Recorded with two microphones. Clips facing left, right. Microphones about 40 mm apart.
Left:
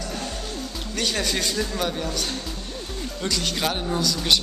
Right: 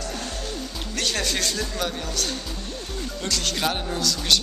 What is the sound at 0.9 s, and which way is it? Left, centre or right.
Speech, centre.